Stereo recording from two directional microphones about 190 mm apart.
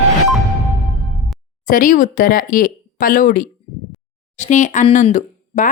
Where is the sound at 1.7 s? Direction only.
45° left (ahead or behind).